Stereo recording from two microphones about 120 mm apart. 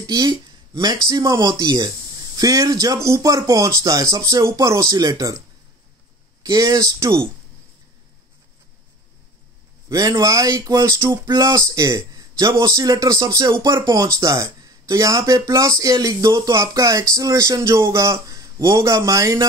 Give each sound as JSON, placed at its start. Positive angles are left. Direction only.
{"t": 0.0, "sound": "speech", "side_deg": -35}
{"t": 6.4, "sound": "speech", "side_deg": -30}
{"t": 9.8, "sound": "speech", "side_deg": -30}